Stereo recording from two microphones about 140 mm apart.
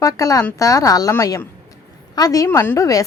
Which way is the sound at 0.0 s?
25° left (ahead or behind).